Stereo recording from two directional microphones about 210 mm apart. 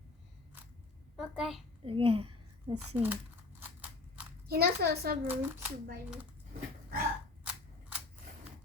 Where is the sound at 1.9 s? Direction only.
25° right (ahead or behind).